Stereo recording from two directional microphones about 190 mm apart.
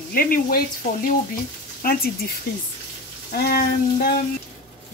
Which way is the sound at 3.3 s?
55° left (ahead or behind).